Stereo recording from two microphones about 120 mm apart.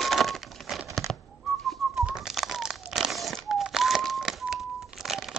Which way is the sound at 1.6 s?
Centre (ahead or behind).